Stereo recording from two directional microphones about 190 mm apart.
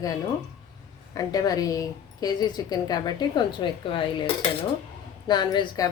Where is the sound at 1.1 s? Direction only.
20° left (ahead or behind).